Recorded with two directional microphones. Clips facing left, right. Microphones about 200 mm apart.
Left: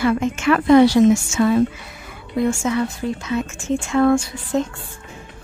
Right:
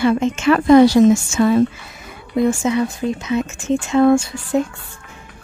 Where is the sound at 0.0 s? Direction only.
25° right (ahead or behind).